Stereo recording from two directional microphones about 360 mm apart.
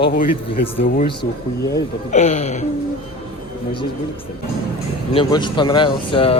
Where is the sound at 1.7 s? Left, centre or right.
Centre.